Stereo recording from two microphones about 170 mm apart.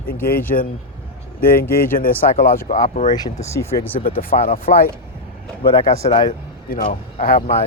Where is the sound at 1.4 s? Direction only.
60° left (ahead or behind).